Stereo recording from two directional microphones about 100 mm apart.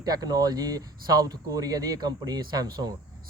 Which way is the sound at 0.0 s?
40° right (ahead or behind).